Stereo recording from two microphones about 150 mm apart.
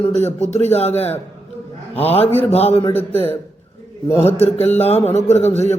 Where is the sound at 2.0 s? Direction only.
40° left (ahead or behind).